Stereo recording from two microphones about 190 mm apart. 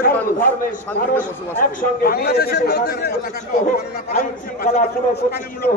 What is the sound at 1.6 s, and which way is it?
A man's voice, 50° left (ahead or behind).